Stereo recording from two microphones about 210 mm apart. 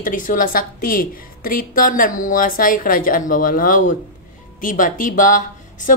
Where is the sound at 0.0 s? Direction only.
40° left (ahead or behind).